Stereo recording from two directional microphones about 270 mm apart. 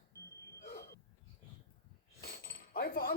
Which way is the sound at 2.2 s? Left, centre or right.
Left.